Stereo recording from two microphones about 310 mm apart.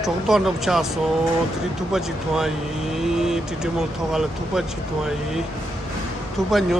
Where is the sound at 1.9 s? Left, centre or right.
Centre.